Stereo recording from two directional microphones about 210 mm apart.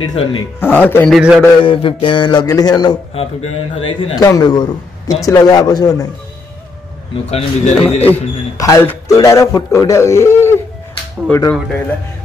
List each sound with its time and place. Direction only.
0.0 s a man's voice: 25° left (ahead or behind)
0.6 s speech: 10° left (ahead or behind)
1.6 s a man's voice: 25° left (ahead or behind)
7.2 s speech: 30° left (ahead or behind)
8.0 s speech: 10° left (ahead or behind)